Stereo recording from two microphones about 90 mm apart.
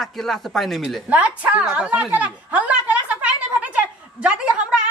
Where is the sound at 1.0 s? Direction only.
15° right (ahead or behind).